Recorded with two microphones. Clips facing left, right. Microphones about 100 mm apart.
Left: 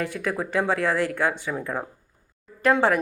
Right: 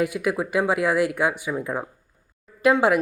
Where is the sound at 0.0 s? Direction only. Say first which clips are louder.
Right 4 dB; 15° right (ahead or behind).